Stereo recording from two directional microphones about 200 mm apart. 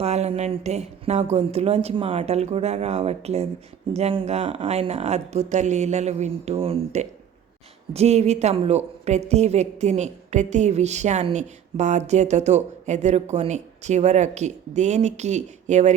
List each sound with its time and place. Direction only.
0.0 s a woman's voice: 30° right (ahead or behind)